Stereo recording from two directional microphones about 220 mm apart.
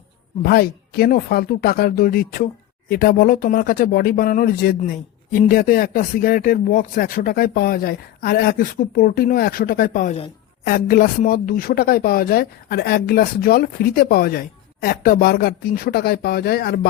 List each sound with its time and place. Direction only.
0.4 s speech: 45° left (ahead or behind)